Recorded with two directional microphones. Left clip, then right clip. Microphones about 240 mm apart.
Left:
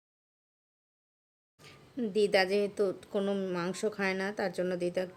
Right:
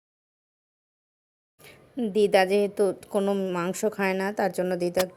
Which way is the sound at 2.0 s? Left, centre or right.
Centre.